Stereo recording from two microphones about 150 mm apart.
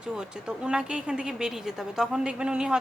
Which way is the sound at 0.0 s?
5° right (ahead or behind).